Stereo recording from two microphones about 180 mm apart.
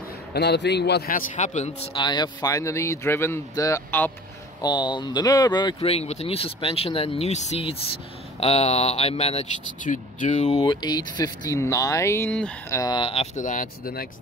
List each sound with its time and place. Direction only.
0.3 s a man's voice: 70° left (ahead or behind); by 1.9 s 40° left (ahead or behind)
2.0 s speech: 25° left (ahead or behind); by 10.6 s 40° left (ahead or behind)
10.6 s speech: 25° left (ahead or behind); by 14.0 s 50° left (ahead or behind)